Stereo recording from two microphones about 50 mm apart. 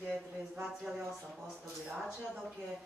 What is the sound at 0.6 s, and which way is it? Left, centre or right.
Speech, centre.